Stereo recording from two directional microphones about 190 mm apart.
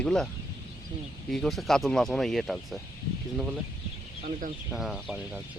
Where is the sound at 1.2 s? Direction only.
Centre (ahead or behind).